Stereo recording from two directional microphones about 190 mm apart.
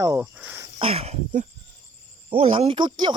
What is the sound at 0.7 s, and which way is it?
Speech, 30° right (ahead or behind).